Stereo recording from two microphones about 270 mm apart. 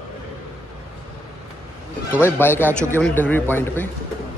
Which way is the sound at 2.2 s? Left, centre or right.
Centre.